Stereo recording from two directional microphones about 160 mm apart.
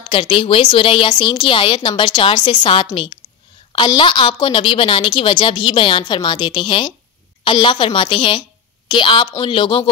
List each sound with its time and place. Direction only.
0.1 s a woman's voice: 35° left (ahead or behind)